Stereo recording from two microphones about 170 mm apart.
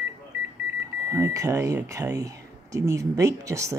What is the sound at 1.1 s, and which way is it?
Speech, 20° right (ahead or behind).